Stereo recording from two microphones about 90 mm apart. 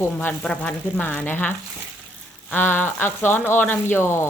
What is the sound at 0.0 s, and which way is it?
Speech, 25° left (ahead or behind).